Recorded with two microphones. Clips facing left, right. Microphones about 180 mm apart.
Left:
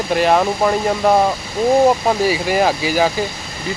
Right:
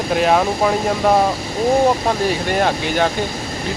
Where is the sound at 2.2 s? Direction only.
5° left (ahead or behind).